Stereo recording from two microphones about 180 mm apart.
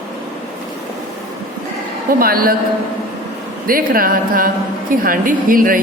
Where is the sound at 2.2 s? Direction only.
55° right (ahead or behind).